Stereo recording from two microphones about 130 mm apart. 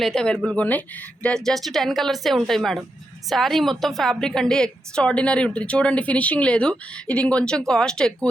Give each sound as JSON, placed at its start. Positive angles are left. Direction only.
{"t": 0.0, "sound": "a woman's voice", "side_deg": 5}